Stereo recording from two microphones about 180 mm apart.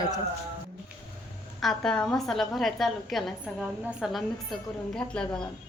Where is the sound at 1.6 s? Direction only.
Centre (ahead or behind).